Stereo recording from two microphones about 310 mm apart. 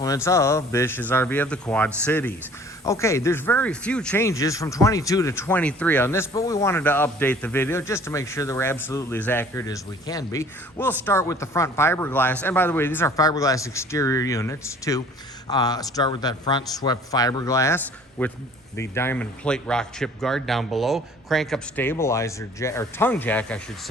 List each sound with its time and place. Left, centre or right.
0.0 s a man's voice: centre